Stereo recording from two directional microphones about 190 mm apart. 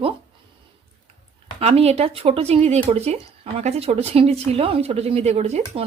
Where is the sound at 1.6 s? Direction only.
35° right (ahead or behind).